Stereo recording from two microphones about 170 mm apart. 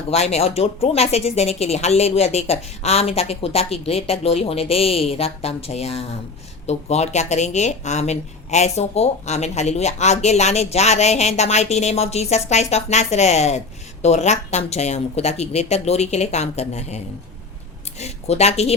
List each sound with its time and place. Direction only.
0.1 s speech: 40° left (ahead or behind)
18.0 s speech: 40° left (ahead or behind)